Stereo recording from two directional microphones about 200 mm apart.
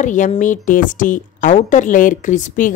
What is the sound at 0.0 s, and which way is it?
A woman's voice, 40° left (ahead or behind).